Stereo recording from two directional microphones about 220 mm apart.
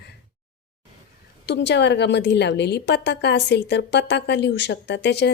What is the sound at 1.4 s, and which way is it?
A woman's voice, 50° left (ahead or behind).